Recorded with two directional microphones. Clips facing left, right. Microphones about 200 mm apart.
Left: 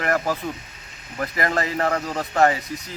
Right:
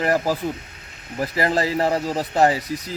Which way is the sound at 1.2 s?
30° right (ahead or behind).